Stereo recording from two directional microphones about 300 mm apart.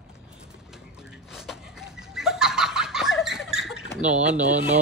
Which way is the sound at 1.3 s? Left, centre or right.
Centre.